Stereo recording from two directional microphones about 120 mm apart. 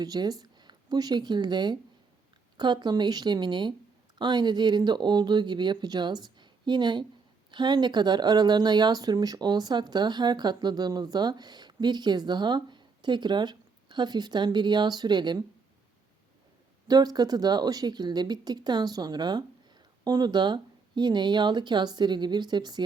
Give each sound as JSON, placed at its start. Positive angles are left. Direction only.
{"t": 0.0, "sound": "speech", "side_deg": -35}
{"t": 16.9, "sound": "speech", "side_deg": -35}